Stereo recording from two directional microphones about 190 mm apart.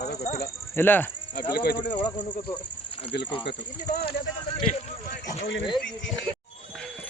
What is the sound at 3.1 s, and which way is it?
Speech, 60° left (ahead or behind).